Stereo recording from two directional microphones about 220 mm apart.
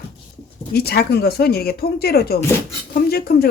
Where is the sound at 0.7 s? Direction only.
45° left (ahead or behind).